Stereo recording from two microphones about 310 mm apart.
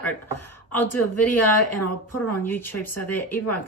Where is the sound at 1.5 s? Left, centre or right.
Left.